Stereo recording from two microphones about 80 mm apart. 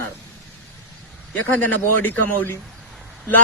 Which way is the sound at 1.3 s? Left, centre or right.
Left.